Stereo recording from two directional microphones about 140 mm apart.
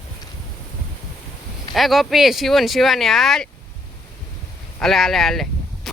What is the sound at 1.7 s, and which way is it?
Speech, centre (ahead or behind).